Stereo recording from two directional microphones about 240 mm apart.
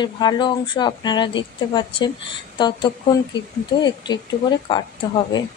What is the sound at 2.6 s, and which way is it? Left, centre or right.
Speech, centre.